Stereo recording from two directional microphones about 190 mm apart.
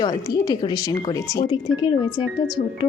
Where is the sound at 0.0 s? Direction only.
20° left (ahead or behind).